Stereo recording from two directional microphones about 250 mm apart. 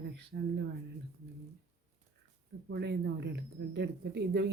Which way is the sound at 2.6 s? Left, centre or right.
Right.